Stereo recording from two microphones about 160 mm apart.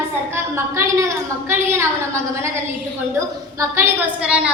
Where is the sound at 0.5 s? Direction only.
20° right (ahead or behind).